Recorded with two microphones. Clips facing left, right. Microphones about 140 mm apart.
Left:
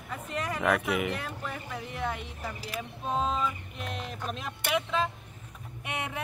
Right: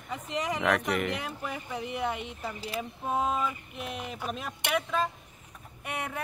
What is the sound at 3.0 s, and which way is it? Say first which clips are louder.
Speech: even; 10° right (ahead or behind).